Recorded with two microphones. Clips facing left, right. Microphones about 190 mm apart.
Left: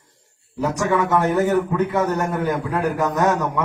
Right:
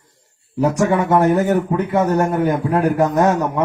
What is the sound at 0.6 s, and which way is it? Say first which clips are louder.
A man's voice: right 4 dB; 30° right (ahead or behind).